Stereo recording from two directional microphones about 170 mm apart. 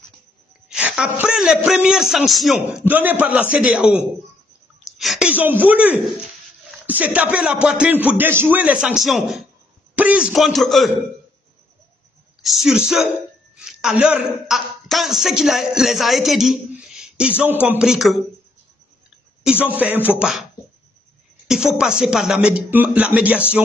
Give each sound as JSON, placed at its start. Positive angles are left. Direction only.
{"t": 0.7, "sound": "a man's voice", "side_deg": -5}
{"t": 12.4, "sound": "a man's voice", "side_deg": 0}
{"t": 19.6, "sound": "a man's voice", "side_deg": -10}
{"t": 21.5, "sound": "speech", "side_deg": -5}